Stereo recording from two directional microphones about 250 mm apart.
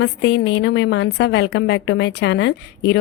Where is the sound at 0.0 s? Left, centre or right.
Left.